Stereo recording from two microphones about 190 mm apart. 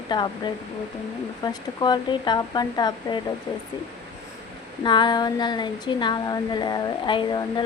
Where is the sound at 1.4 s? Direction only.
20° left (ahead or behind).